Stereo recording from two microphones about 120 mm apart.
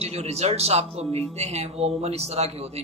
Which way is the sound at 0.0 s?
60° right (ahead or behind).